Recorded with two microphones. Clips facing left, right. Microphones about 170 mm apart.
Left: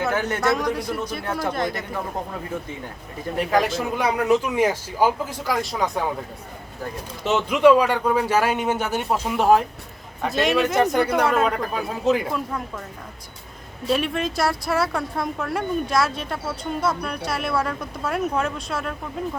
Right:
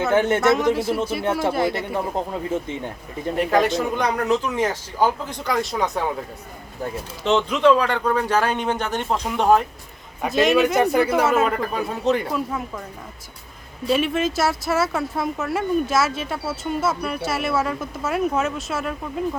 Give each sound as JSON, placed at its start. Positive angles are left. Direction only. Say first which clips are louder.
{"t": 0.1, "sound": "a man's voice", "louder": "right 5 dB", "side_deg": -25}
{"t": 3.3, "sound": "speech", "louder": "right 2 dB", "side_deg": 0}
{"t": 7.3, "sound": "speech", "louder": "left 1 dB", "side_deg": 10}
{"t": 13.8, "sound": "speech", "louder": "right 2 dB", "side_deg": 0}